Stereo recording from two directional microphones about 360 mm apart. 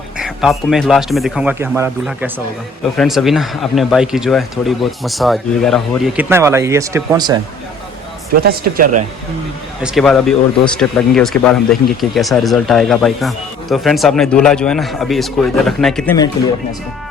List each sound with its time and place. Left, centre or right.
0.2 s speech: centre
8.4 s speech: right
9.8 s speech: centre